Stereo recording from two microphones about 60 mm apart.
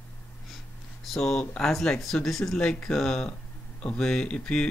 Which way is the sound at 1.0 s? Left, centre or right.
Centre.